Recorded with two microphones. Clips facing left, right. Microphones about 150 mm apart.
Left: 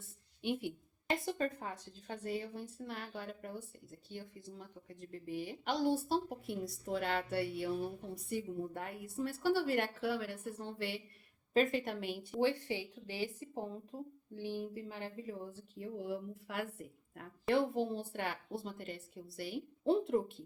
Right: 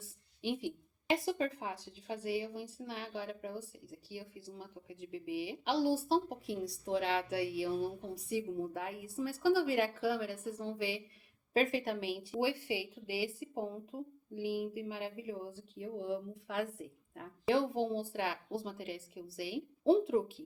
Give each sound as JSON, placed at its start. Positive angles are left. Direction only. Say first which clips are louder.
{"t": 0.4, "sound": "a woman's voice", "louder": "right 1 dB", "side_deg": 0}
{"t": 1.6, "sound": "a woman's voice", "louder": "right 3 dB", "side_deg": -80}
{"t": 2.6, "sound": "speech", "louder": "right 1 dB", "side_deg": -5}